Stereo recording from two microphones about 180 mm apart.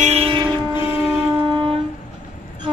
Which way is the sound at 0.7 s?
30° left (ahead or behind).